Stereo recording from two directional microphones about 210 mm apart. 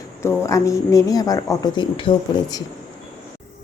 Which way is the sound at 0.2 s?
15° left (ahead or behind).